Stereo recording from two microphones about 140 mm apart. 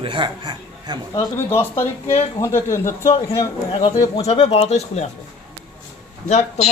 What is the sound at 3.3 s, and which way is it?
Speech, 40° left (ahead or behind).